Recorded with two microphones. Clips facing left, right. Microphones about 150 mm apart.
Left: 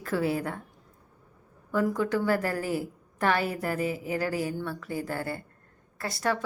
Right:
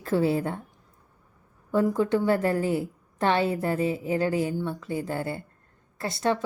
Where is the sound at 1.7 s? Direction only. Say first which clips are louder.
Right 3 dB; 25° right (ahead or behind).